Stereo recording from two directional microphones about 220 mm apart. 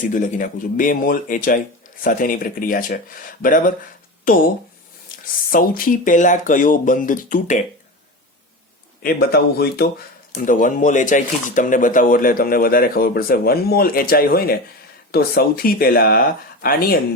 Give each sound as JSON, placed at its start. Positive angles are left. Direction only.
{"t": 0.0, "sound": "speech", "side_deg": 35}
{"t": 5.5, "sound": "speech", "side_deg": 40}
{"t": 9.0, "sound": "speech", "side_deg": 45}